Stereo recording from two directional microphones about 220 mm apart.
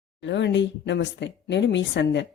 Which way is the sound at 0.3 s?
55° left (ahead or behind).